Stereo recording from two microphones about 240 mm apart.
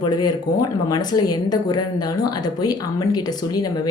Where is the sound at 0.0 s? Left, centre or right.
Centre.